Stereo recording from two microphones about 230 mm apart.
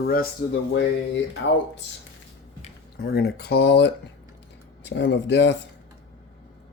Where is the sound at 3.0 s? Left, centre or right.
Left.